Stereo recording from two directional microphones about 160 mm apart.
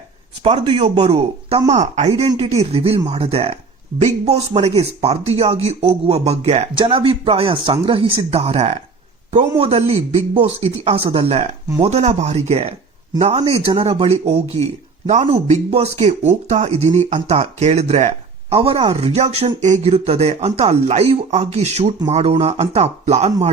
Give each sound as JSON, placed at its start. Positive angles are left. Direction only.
{"t": 0.4, "sound": "a man's voice", "side_deg": -35}